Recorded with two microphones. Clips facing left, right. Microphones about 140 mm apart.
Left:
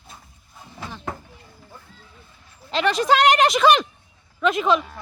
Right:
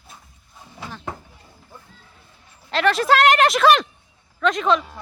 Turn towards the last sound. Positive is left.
turn(degrees=5)  # may be behind; listen again after turning